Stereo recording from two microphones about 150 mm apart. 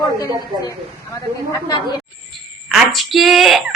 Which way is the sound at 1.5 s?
30° left (ahead or behind).